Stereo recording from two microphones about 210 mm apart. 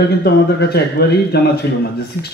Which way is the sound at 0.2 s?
50° left (ahead or behind).